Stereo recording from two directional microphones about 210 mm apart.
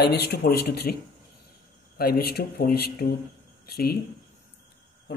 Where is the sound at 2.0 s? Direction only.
45° left (ahead or behind).